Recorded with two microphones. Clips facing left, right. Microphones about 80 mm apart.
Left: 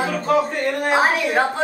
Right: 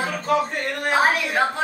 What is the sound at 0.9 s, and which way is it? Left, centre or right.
Speech, centre.